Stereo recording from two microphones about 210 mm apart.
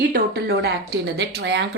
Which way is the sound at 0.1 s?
50° right (ahead or behind).